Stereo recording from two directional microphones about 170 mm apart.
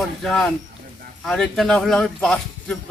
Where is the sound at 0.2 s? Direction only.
Centre (ahead or behind).